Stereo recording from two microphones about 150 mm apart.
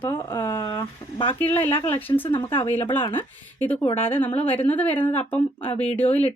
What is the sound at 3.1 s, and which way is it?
Speech, 10° left (ahead or behind).